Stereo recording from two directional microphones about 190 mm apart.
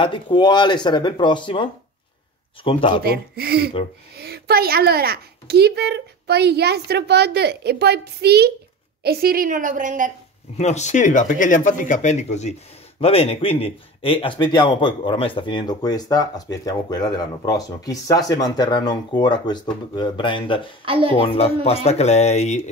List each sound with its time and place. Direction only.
0.0 s speech: 25° left (ahead or behind)
3.0 s a child's voice: 55° right (ahead or behind)
10.6 s speech: 35° left (ahead or behind)
20.8 s speech: 25° right (ahead or behind)
21.6 s speech: 35° left (ahead or behind)